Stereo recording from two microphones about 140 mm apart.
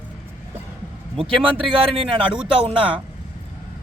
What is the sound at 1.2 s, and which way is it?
Speech, 40° right (ahead or behind).